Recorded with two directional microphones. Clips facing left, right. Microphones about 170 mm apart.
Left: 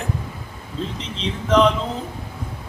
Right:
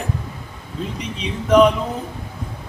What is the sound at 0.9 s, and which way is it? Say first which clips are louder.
Speech: right 1 dB; 10° right (ahead or behind).